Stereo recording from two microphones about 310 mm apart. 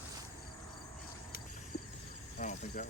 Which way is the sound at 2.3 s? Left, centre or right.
Left.